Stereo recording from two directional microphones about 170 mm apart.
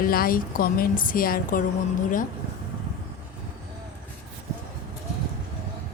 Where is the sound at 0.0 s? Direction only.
60° left (ahead or behind).